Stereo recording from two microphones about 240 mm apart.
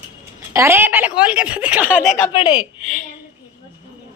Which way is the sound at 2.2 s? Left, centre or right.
Centre.